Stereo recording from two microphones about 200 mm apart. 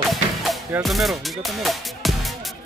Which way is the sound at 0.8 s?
Centre (ahead or behind).